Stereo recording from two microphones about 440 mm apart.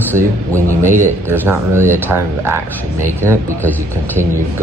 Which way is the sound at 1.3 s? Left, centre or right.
Centre.